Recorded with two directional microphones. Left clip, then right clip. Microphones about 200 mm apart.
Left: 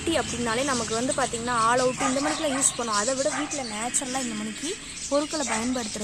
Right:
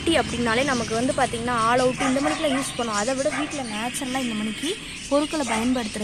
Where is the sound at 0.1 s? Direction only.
5° left (ahead or behind).